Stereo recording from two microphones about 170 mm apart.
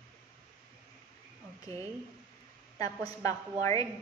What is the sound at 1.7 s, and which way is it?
A woman's voice, 20° left (ahead or behind).